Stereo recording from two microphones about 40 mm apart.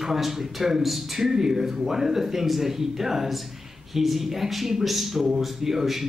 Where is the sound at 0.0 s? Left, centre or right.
Centre.